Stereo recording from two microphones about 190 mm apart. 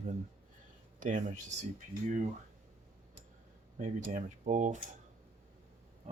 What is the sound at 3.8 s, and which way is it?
Speech, 40° right (ahead or behind).